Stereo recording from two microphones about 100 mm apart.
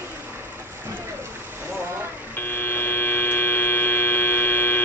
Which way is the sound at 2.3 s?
20° left (ahead or behind).